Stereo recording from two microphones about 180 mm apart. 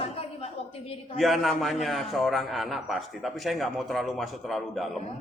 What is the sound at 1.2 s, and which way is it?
A man's voice, centre (ahead or behind).